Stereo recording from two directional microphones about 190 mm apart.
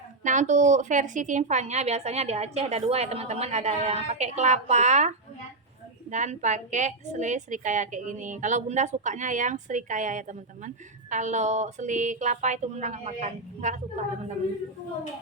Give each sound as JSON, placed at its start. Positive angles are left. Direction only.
{"t": 0.2, "sound": "a woman's voice", "side_deg": -40}